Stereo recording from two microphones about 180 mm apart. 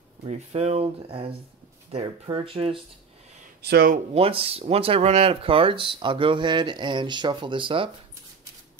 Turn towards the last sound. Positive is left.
turn(degrees=-30)  # may be behind; listen again after turning